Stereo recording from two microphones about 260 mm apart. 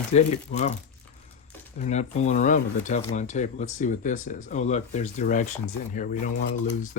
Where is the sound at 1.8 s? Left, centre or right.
Left.